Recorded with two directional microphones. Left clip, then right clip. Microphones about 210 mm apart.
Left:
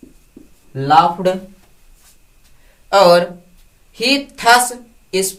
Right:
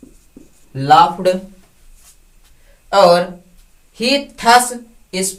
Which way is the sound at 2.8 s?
30° left (ahead or behind).